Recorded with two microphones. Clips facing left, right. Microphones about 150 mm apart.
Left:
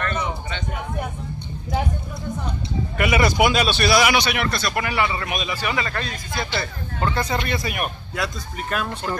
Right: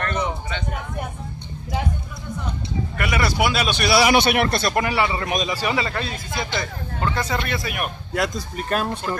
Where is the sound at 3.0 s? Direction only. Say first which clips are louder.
Left 4 dB; 5° left (ahead or behind).